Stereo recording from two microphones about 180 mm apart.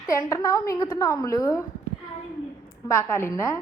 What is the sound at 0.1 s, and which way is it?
A woman's voice, 15° left (ahead or behind).